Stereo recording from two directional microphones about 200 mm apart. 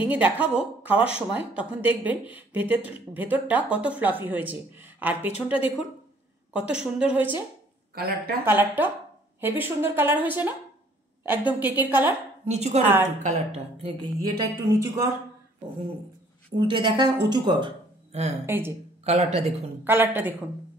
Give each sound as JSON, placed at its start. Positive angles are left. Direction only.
{"t": 0.0, "sound": "speech", "side_deg": -5}
{"t": 6.5, "sound": "a woman's voice", "side_deg": -5}
{"t": 7.9, "sound": "speech", "side_deg": -50}
{"t": 8.5, "sound": "speech", "side_deg": -10}
{"t": 12.4, "sound": "speech", "side_deg": -35}
{"t": 12.8, "sound": "speech", "side_deg": -10}
{"t": 13.2, "sound": "speech", "side_deg": -30}
{"t": 16.5, "sound": "speech", "side_deg": -25}
{"t": 18.4, "sound": "speech", "side_deg": -10}
{"t": 19.0, "sound": "speech", "side_deg": -35}
{"t": 19.8, "sound": "speech", "side_deg": -10}